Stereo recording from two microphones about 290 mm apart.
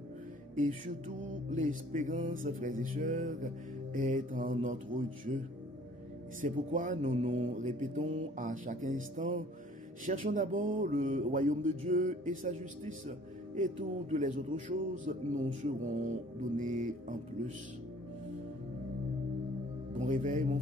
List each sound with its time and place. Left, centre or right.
0.6 s speech: right
6.4 s speech: right
14.1 s speech: right
20.0 s speech: right